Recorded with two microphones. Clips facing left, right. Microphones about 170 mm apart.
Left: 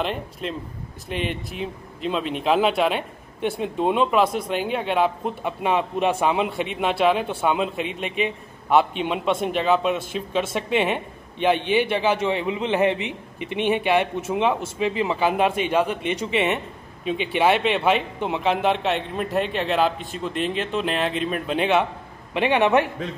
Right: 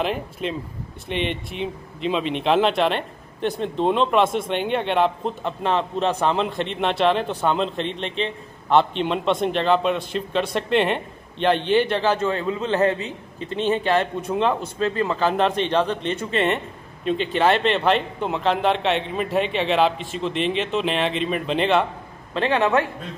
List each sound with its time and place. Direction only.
0.0 s a man's voice: centre (ahead or behind); by 22.8 s 15° left (ahead or behind)